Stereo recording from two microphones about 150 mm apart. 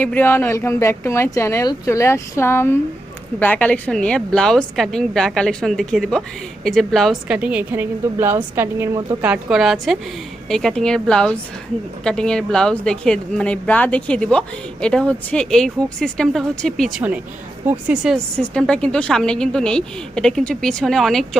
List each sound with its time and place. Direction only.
0.0 s a woman's voice: 10° left (ahead or behind); by 9.0 s 15° right (ahead or behind)
9.2 s a woman's voice: 5° right (ahead or behind)
18.3 s a woman's voice: 5° left (ahead or behind)